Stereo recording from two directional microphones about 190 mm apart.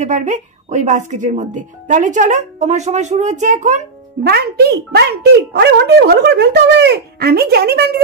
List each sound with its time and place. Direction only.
0.0 s speech: 40° right (ahead or behind)
4.2 s speech: 55° right (ahead or behind)